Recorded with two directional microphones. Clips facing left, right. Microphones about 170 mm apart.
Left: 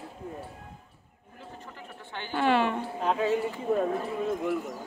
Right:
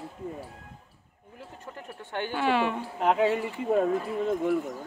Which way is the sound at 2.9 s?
75° right (ahead or behind).